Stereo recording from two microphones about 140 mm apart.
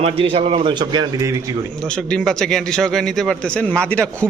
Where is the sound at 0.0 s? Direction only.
45° right (ahead or behind); by 1.5 s 25° right (ahead or behind).